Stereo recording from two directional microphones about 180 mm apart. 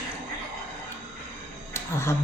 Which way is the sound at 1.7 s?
15° left (ahead or behind).